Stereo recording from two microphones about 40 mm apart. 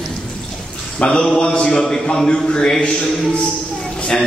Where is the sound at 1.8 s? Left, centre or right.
Centre.